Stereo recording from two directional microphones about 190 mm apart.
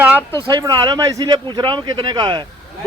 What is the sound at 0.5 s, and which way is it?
A man's voice, 20° right (ahead or behind).